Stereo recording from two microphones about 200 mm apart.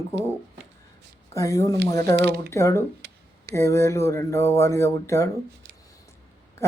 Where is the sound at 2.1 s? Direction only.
55° right (ahead or behind).